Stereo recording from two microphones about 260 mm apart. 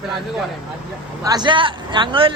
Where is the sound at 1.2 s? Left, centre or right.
Centre.